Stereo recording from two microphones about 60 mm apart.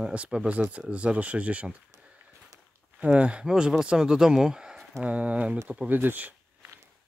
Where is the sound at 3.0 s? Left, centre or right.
Centre.